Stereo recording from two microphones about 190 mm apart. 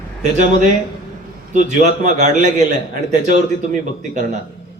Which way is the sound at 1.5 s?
40° right (ahead or behind).